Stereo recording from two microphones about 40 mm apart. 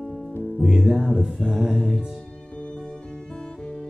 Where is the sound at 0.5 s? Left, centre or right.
Centre.